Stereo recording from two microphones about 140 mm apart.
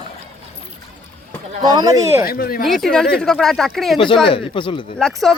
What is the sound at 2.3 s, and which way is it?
Speech, 90° left.